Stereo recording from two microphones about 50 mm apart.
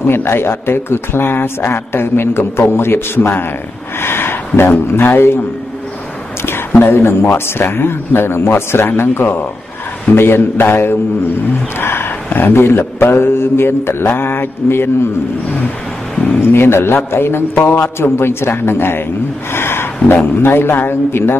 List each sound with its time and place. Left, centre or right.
0.0 s speech: left
6.8 s speech: left
11.8 s roaring cats: left
12.4 s speech: left
16.3 s speech: left
19.5 s a sound: left
20.3 s speech: left